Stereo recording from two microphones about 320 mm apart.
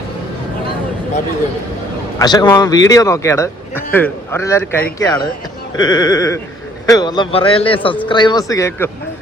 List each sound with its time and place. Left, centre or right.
2.1 s a man's voice: centre